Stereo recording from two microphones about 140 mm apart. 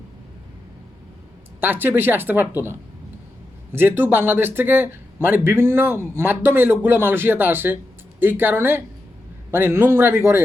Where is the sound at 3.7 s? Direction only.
15° right (ahead or behind).